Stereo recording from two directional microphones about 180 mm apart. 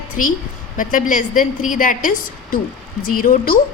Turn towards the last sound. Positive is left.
turn(degrees=50)  # may be behind; listen again after turning